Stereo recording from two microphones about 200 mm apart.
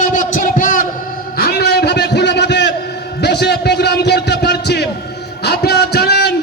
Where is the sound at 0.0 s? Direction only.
40° left (ahead or behind).